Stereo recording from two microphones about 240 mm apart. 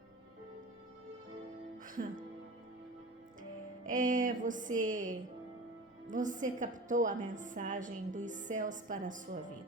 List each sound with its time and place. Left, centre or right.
3.8 s a woman's voice: right